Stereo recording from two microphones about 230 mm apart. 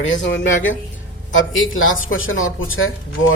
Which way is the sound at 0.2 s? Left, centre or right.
Left.